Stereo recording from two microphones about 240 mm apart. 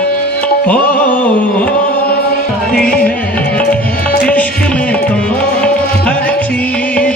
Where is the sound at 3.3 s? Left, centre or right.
Centre.